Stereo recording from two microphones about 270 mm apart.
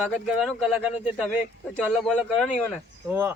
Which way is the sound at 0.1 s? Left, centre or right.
Centre.